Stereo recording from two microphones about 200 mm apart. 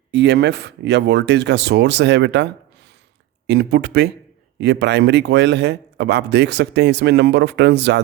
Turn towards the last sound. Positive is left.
turn(degrees=-60)  # may be behind; listen again after turning